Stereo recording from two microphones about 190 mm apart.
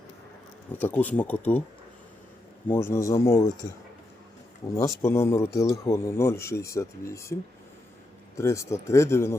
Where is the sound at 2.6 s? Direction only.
10° left (ahead or behind).